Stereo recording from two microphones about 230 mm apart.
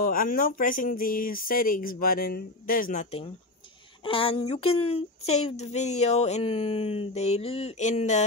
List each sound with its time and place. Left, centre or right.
0.0 s speech: left